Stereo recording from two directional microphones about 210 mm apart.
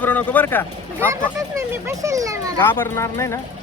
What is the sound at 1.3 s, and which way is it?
Speech, 15° right (ahead or behind).